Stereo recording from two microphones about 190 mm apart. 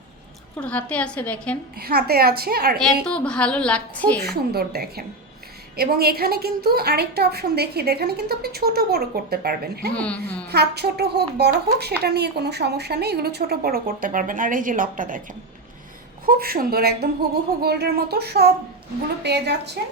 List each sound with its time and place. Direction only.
0.5 s a woman's voice: 10° left (ahead or behind)
1.8 s a woman's voice: 55° right (ahead or behind)
2.7 s a woman's voice: 5° left (ahead or behind)
4.2 s a woman's voice: 55° right (ahead or behind)
9.9 s a woman's voice: 5° left (ahead or behind)
10.5 s a woman's voice: 60° right (ahead or behind)
16.2 s a woman's voice: 50° right (ahead or behind)